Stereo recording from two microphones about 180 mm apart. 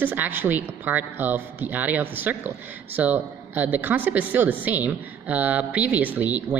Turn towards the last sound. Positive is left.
turn(degrees=-10)  # may be behind; listen again after turning